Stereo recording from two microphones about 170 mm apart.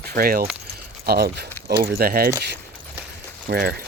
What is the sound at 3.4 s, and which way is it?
Speech, 65° right (ahead or behind).